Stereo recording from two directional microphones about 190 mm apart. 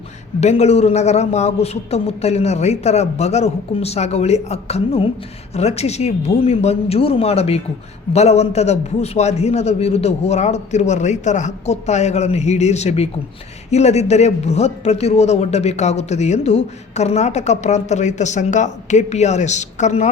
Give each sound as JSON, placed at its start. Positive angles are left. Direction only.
{"t": 0.3, "sound": "a man's voice", "side_deg": 35}